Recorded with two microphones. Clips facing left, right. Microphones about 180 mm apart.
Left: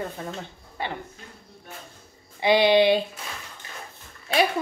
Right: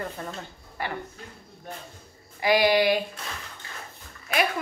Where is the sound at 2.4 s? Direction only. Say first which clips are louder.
Left 3 dB; 25° left (ahead or behind).